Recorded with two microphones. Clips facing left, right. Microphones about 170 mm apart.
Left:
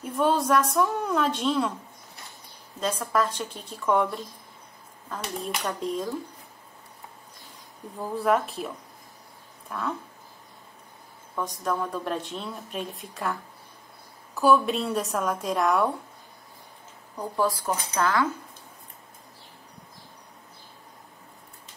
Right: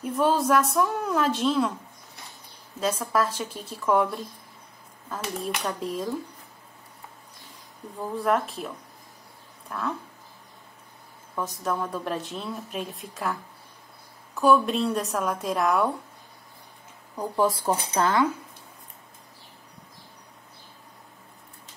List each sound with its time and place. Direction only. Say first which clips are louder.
0.0 s speech: right 1 dB; centre (ahead or behind)
2.8 s speech: right 1 dB; 5° right (ahead or behind)
8.2 s speech: left 1 dB; centre (ahead or behind)
11.3 s speech: even; 5° right (ahead or behind)
17.2 s speech: right 2 dB; 20° right (ahead or behind)